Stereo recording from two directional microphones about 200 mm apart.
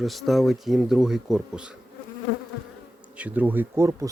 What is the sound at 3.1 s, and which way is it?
Speech, 5° right (ahead or behind).